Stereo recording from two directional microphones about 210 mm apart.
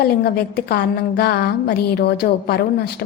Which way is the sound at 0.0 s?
50° left (ahead or behind).